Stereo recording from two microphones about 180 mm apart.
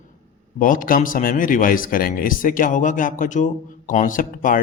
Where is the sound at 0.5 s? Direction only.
50° left (ahead or behind).